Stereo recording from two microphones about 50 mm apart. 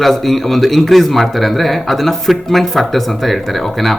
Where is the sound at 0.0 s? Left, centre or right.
Centre.